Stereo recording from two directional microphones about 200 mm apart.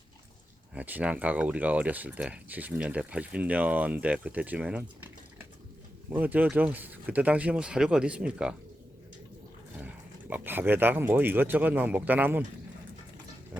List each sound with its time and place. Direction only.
0.7 s speech: 5° right (ahead or behind)
6.1 s speech: 10° right (ahead or behind)
9.8 s speech: 10° right (ahead or behind)